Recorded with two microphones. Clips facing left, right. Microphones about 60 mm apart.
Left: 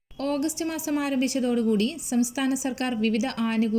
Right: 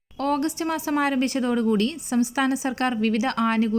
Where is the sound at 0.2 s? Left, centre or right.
Right.